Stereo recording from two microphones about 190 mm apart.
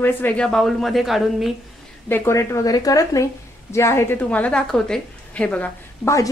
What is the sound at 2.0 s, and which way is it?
A woman's voice, 10° left (ahead or behind).